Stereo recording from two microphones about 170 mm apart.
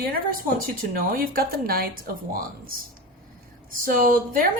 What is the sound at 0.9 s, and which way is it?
A woman's voice, 60° right (ahead or behind).